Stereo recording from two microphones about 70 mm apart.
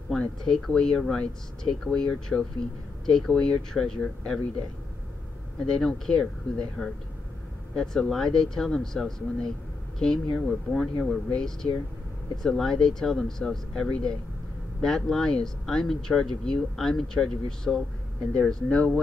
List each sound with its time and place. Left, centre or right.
0.1 s speech: centre
5.6 s speech: centre